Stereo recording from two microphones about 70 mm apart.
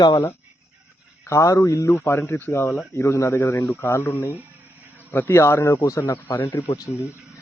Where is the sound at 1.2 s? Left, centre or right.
Left.